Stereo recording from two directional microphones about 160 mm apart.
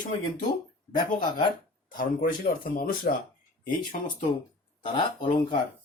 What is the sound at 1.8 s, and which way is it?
Speech, 55° left (ahead or behind).